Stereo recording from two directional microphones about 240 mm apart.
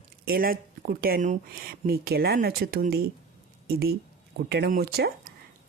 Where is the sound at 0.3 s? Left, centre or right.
Right.